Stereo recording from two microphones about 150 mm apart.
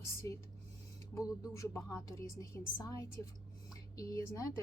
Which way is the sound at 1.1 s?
20° left (ahead or behind).